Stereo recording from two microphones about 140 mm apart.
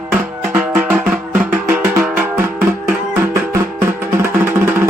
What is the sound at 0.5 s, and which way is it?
Music, 10° right (ahead or behind).